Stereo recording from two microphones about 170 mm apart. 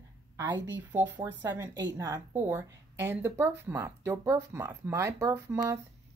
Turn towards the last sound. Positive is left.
turn(degrees=-15)  # may be behind; listen again after turning